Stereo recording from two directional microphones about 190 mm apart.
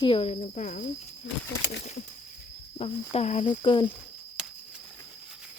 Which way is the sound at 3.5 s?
25° left (ahead or behind).